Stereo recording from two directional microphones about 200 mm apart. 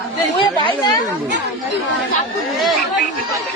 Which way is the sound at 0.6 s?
20° left (ahead or behind).